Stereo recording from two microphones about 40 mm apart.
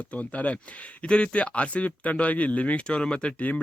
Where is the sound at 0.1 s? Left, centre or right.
Left.